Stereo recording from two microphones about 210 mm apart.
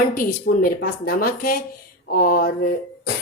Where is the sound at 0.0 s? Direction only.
40° left (ahead or behind).